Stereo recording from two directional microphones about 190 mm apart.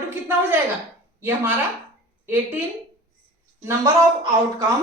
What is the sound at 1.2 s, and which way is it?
Speech, 10° right (ahead or behind).